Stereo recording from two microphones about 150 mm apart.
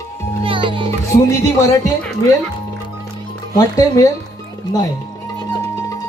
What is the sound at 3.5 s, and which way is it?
Speech, 25° left (ahead or behind).